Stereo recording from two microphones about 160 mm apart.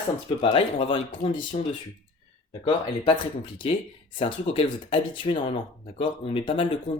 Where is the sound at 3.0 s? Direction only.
35° left (ahead or behind).